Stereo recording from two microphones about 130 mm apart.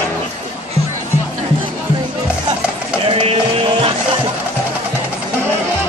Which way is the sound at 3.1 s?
50° right (ahead or behind).